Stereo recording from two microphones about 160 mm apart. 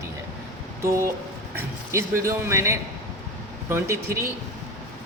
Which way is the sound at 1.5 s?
20° right (ahead or behind).